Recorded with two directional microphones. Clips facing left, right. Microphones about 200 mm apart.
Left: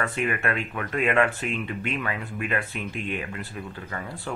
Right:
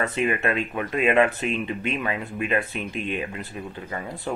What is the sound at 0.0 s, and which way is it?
Speech, 20° right (ahead or behind).